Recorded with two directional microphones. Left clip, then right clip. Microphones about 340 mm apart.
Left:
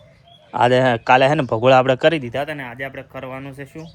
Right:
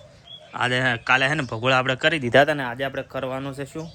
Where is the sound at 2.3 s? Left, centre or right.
Right.